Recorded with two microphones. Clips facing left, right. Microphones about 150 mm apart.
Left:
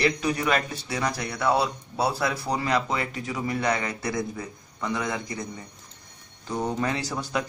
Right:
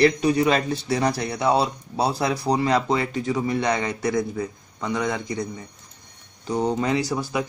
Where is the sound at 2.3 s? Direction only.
40° right (ahead or behind); by 5.2 s 20° right (ahead or behind).